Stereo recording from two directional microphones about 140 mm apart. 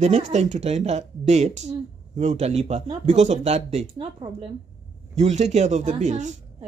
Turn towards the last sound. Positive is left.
turn(degrees=-60)  # may be behind; listen again after turning